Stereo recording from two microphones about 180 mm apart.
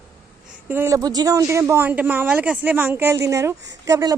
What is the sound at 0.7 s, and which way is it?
A woman's voice, 15° right (ahead or behind).